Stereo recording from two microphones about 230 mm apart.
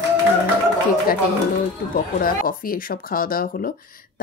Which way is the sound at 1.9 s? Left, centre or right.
Left.